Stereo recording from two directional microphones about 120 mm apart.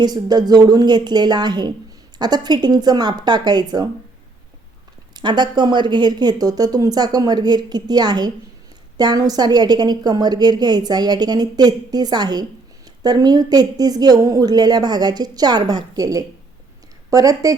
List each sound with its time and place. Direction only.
0.0 s a woman's voice: 35° right (ahead or behind)
5.1 s a woman's voice: 35° right (ahead or behind)